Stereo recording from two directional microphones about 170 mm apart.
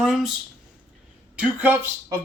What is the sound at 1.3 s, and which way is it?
Speech, 10° right (ahead or behind).